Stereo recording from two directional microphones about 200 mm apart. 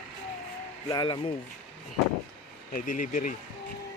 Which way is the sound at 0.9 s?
20° left (ahead or behind).